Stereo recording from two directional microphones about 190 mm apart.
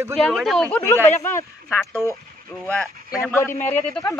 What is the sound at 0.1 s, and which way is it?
Speech, centre (ahead or behind).